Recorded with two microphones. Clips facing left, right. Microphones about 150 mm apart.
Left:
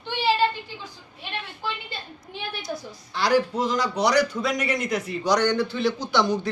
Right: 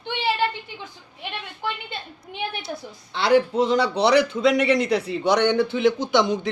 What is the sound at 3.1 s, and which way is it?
A man's voice, 25° right (ahead or behind).